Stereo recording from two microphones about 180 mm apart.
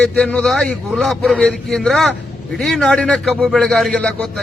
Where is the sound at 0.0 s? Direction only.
5° left (ahead or behind).